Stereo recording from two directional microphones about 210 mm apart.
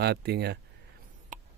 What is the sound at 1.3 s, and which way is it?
Mouse, 35° right (ahead or behind).